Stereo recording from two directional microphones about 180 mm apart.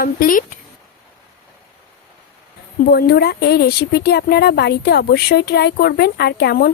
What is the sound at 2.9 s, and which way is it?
Speech, 60° left (ahead or behind).